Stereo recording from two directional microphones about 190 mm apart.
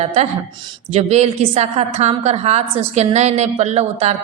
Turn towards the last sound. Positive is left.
turn(degrees=-35)  # may be behind; listen again after turning